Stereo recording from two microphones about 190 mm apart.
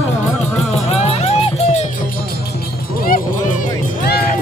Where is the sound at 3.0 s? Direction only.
50° left (ahead or behind).